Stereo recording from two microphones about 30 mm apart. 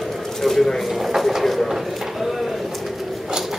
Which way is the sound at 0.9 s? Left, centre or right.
Centre.